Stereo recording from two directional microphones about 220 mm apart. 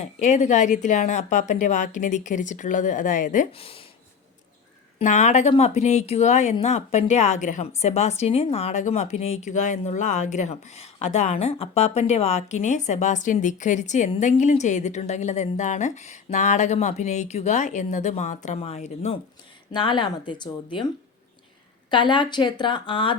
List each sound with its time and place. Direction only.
0.0 s speech: 30° left (ahead or behind)
4.9 s speech: 30° left (ahead or behind)
21.8 s speech: 20° left (ahead or behind)